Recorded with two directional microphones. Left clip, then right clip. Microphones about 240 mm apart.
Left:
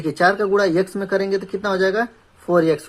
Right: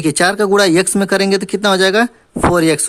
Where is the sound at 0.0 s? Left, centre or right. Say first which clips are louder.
Right 4 dB; right.